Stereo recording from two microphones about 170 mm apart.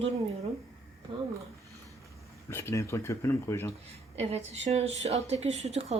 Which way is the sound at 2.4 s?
15° left (ahead or behind).